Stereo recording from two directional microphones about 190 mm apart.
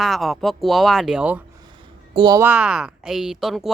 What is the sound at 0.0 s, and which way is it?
Speech, centre (ahead or behind).